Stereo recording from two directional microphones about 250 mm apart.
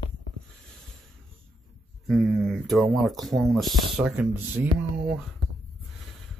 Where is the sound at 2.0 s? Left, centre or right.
Centre.